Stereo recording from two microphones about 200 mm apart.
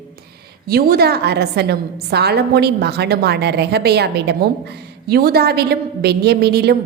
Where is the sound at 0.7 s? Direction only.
50° right (ahead or behind).